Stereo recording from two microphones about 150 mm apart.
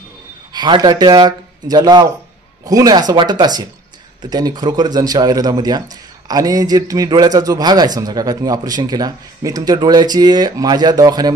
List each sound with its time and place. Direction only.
0.5 s speech: 30° right (ahead or behind)